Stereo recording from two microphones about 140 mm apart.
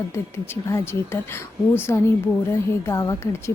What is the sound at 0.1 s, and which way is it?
A woman's voice, 20° left (ahead or behind).